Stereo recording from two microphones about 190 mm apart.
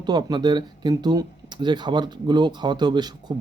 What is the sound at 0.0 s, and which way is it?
Speech, 20° right (ahead or behind).